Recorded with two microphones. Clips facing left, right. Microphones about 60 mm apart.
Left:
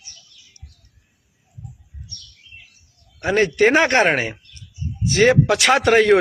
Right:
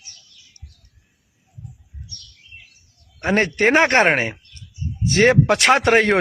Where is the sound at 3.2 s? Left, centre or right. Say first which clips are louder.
Left 1 dB; right.